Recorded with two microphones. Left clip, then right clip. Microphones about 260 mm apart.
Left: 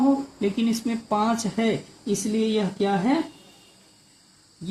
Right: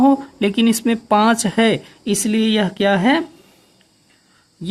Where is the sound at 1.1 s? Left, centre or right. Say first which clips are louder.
Right 9 dB; right.